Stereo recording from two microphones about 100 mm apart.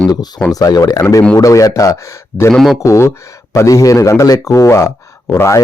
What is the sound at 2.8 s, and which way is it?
Speech, 30° left (ahead or behind).